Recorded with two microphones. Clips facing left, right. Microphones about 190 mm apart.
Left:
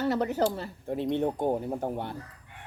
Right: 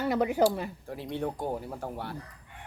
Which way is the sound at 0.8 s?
20° left (ahead or behind).